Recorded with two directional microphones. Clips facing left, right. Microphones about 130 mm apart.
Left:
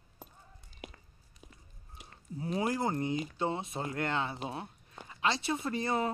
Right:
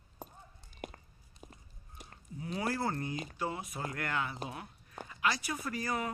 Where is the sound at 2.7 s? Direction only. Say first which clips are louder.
Left 3 dB; 20° left (ahead or behind).